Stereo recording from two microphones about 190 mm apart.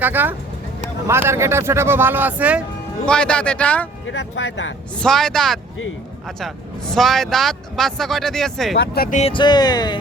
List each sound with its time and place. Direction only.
0.0 s speech: 10° right (ahead or behind)
3.1 s speech: 5° left (ahead or behind)
4.0 s speech: 70° left (ahead or behind)
4.9 s speech: 5° left (ahead or behind)
8.7 s speech: 60° left (ahead or behind)
9.0 s speech: 40° left (ahead or behind)
9.3 s speech: 25° left (ahead or behind)